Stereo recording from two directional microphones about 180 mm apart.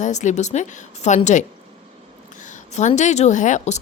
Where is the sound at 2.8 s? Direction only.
40° left (ahead or behind).